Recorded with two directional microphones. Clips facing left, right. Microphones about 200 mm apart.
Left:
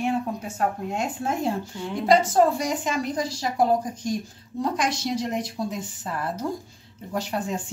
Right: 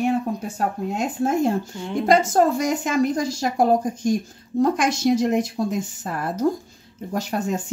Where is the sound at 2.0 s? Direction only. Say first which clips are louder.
Right 1 dB; 50° right (ahead or behind).